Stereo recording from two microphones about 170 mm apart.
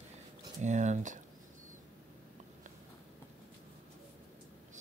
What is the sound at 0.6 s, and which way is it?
Speech, 45° right (ahead or behind).